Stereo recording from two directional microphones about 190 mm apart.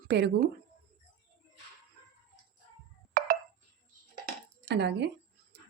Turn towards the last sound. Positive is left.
turn(degrees=-65)  # may be behind; listen again after turning